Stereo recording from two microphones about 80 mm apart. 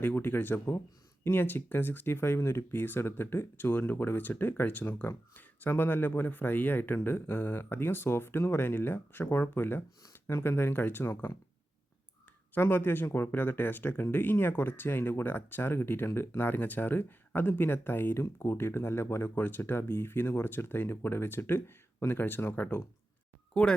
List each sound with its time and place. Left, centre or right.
0.0 s speech: left
12.5 s speech: left
23.6 s speech: centre